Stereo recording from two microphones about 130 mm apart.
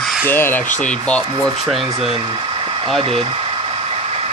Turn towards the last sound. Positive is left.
turn(degrees=0)  # may be behind; listen again after turning